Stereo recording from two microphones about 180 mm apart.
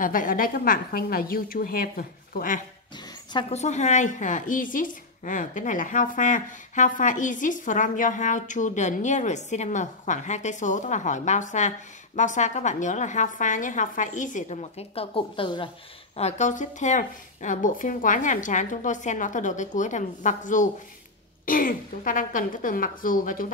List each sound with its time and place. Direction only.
0.0 s a woman's voice: 50° left (ahead or behind)
3.5 s a woman's voice: 40° left (ahead or behind)
16.2 s a woman's voice: 40° left (ahead or behind)